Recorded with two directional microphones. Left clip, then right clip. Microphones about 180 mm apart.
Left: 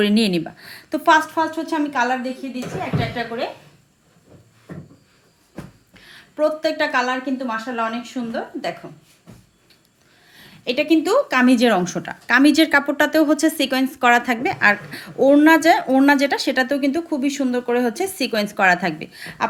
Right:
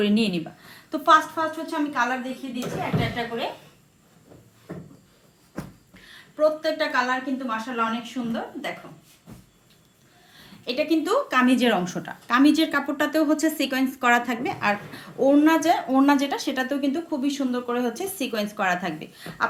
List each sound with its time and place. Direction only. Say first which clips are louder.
0.0 s a woman's voice: left 5 dB; 45° left (ahead or behind)
6.3 s a woman's voice: left 2 dB; 50° left (ahead or behind)
10.7 s a woman's voice: left 5 dB; 45° left (ahead or behind)